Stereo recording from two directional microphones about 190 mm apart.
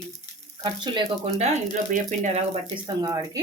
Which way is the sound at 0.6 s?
30° right (ahead or behind).